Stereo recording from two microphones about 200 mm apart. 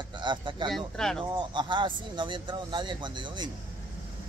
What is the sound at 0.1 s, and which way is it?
Speech, 25° right (ahead or behind).